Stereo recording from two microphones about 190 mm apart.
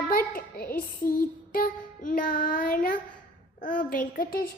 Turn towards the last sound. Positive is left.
turn(degrees=50)  # may be behind; listen again after turning